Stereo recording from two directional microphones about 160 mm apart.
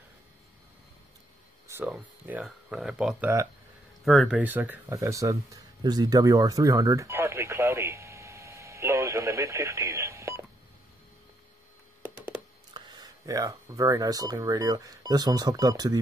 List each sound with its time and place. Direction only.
1.9 s speech: 10° right (ahead or behind)
4.4 s speech: 10° right (ahead or behind)
12.7 s speech: 30° right (ahead or behind)